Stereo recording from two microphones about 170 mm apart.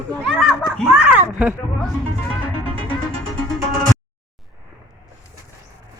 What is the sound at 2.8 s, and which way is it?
Music, 10° left (ahead or behind).